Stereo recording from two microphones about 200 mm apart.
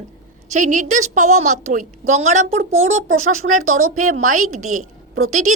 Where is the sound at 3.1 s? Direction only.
90° right.